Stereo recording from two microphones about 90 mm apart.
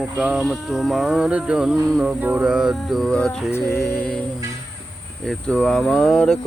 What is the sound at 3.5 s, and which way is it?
Music, 30° left (ahead or behind).